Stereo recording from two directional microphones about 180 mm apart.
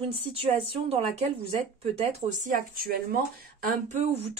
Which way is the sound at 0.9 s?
35° right (ahead or behind).